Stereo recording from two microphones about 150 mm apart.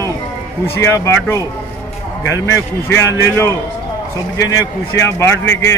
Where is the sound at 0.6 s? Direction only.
15° left (ahead or behind).